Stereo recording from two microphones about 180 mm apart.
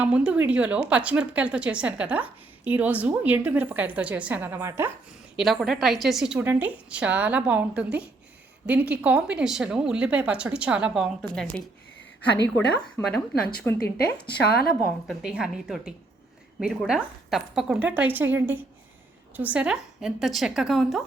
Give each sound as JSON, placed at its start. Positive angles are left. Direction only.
{"t": 0.0, "sound": "a woman's voice", "side_deg": -5}
{"t": 5.4, "sound": "a woman's voice", "side_deg": 0}
{"t": 13.7, "sound": "a woman's voice", "side_deg": 60}
{"t": 15.0, "sound": "a woman's voice", "side_deg": -5}